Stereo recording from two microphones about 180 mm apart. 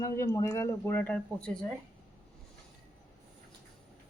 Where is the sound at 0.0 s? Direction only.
15° left (ahead or behind).